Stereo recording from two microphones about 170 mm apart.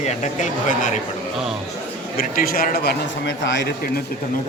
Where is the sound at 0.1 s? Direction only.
45° left (ahead or behind).